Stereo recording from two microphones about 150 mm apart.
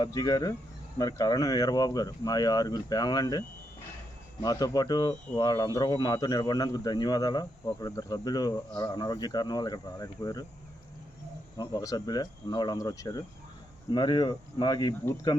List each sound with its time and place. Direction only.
0.0 s speech: 25° left (ahead or behind)
4.4 s speech: 25° left (ahead or behind)
11.5 s speech: 25° left (ahead or behind)